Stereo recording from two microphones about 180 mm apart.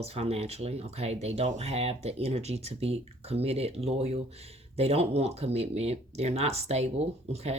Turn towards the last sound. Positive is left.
turn(degrees=-35)  # may be behind; listen again after turning